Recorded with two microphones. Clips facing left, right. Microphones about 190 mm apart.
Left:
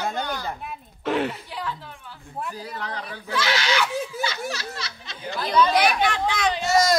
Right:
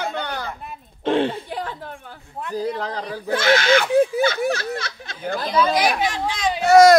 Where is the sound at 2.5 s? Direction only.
40° right (ahead or behind).